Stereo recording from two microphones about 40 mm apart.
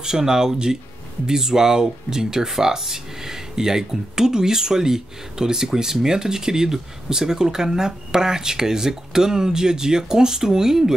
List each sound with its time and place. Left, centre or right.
0.0 s speech: centre